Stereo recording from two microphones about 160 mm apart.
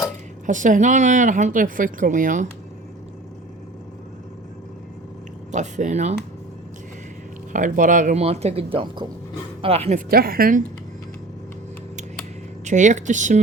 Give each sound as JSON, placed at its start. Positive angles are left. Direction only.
{"t": 0.4, "sound": "speech", "side_deg": -55}
{"t": 5.5, "sound": "speech", "side_deg": -50}
{"t": 7.5, "sound": "speech", "side_deg": -55}
{"t": 10.1, "sound": "a woman's voice", "side_deg": -65}
{"t": 12.6, "sound": "speech", "side_deg": -50}